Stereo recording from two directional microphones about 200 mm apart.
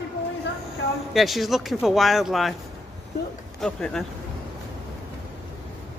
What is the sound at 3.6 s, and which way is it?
Speech, 5° left (ahead or behind).